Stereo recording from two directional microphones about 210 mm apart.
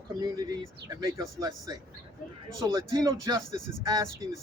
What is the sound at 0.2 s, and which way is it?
Speech, 15° right (ahead or behind).